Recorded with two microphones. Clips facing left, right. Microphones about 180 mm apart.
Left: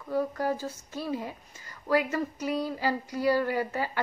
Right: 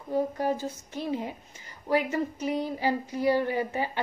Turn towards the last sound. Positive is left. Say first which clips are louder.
# right 1 dB
turn(degrees=-20)  # may be behind; listen again after turning